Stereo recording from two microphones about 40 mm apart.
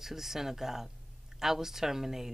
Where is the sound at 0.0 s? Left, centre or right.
Centre.